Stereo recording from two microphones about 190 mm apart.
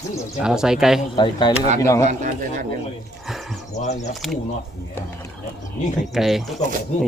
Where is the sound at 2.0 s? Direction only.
45° right (ahead or behind).